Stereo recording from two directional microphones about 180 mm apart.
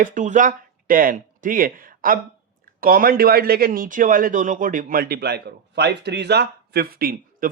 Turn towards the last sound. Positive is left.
turn(degrees=-55)  # may be behind; listen again after turning